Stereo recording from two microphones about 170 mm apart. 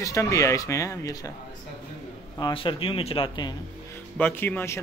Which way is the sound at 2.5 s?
30° left (ahead or behind).